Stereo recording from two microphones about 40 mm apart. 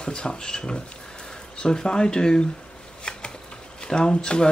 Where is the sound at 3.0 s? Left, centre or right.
Left.